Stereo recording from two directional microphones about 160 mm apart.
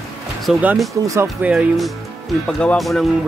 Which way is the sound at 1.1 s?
10° right (ahead or behind).